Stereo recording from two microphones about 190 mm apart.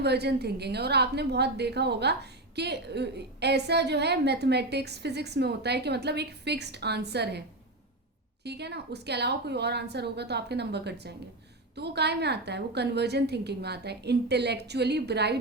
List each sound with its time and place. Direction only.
0.0 s a woman's voice: 60° right (ahead or behind)
8.4 s a woman's voice: 60° right (ahead or behind)